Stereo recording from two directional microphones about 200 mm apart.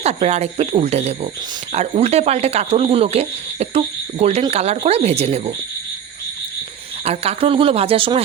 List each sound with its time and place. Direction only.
0.0 s speech: 30° right (ahead or behind)
7.0 s speech: 30° right (ahead or behind)